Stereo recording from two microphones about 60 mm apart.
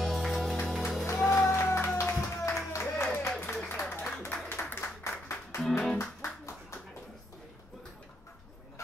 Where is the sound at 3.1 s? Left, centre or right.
Left.